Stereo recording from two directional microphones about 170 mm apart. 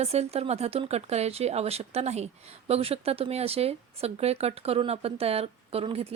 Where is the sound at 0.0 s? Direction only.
40° right (ahead or behind).